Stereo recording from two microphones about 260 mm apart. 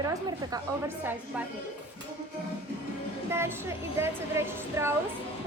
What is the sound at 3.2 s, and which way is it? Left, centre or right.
A woman's voice, centre.